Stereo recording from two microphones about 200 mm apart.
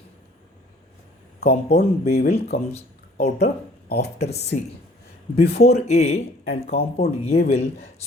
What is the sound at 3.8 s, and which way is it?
Speech, 55° left (ahead or behind).